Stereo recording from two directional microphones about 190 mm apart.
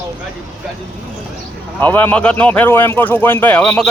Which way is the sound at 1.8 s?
10° left (ahead or behind).